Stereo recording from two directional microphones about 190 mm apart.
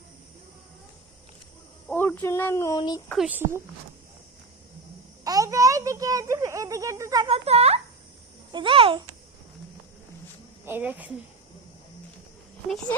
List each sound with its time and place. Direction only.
1.9 s speech: 10° left (ahead or behind)
3.2 s speech: 10° right (ahead or behind)
5.2 s a child's voice: 20° right (ahead or behind)
7.3 s a child's voice: 30° right (ahead or behind)
10.7 s speech: 10° right (ahead or behind)